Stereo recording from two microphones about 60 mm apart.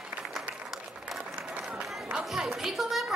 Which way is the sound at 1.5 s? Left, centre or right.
Centre.